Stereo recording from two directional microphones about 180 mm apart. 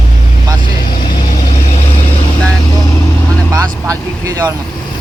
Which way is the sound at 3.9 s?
20° right (ahead or behind).